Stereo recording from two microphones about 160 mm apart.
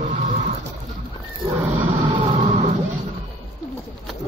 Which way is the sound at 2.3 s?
40° right (ahead or behind).